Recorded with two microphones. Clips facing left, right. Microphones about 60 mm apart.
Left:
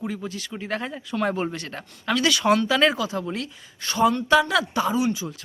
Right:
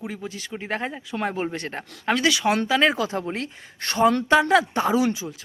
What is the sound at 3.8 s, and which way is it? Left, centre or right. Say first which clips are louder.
Speech: right 2 dB; right.